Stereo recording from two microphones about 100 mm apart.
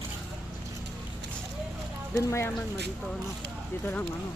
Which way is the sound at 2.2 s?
30° left (ahead or behind).